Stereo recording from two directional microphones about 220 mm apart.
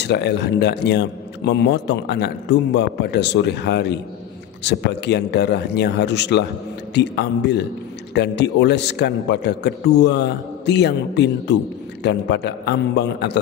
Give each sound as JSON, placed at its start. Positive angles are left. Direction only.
{"t": 0.0, "sound": "a man's voice", "side_deg": 50}